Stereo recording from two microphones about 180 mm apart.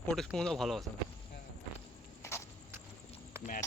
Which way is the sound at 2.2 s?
15° left (ahead or behind).